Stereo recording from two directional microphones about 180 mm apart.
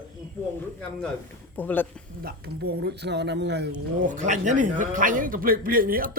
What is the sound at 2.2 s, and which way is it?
Speech, 60° right (ahead or behind).